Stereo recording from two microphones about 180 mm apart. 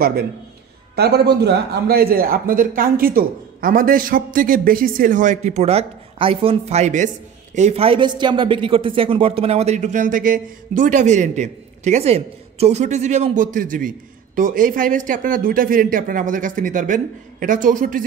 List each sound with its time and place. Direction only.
0.9 s speech: 65° right (ahead or behind)